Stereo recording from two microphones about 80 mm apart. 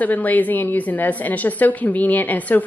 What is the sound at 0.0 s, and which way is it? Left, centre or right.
Speech, left.